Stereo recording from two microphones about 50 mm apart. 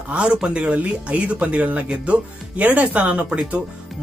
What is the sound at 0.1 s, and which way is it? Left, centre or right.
Speech, right.